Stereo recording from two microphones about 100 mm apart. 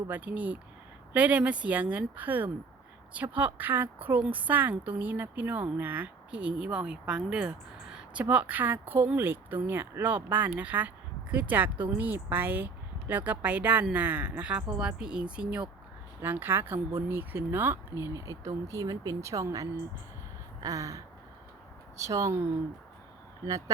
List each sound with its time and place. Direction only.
0.1 s a woman's voice: 15° right (ahead or behind); by 19.6 s 35° right (ahead or behind)
20.6 s gasp: 35° right (ahead or behind)
21.9 s speech: 30° right (ahead or behind)
23.5 s speech: 35° right (ahead or behind)